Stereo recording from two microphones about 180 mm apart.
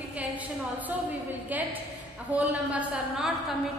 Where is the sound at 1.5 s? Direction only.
10° right (ahead or behind).